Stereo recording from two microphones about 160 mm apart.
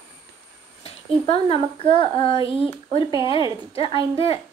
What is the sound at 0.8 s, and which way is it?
A woman's voice, 35° left (ahead or behind).